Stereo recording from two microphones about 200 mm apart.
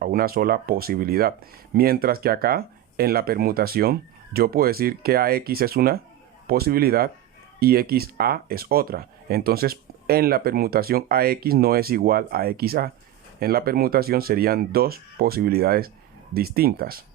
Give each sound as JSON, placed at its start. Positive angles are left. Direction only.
{"t": 0.0, "sound": "speech", "side_deg": -50}